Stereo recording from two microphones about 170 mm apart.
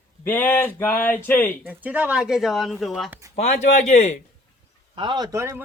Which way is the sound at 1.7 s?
10° right (ahead or behind).